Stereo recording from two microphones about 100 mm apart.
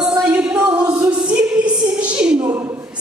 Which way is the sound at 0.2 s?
10° right (ahead or behind).